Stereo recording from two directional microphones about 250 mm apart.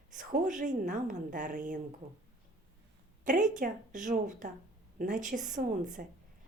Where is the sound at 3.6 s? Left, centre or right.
Right.